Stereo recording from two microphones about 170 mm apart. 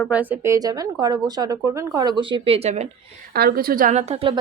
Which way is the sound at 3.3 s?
65° right (ahead or behind).